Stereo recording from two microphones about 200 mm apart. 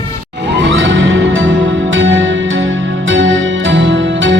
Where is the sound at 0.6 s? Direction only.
65° right (ahead or behind).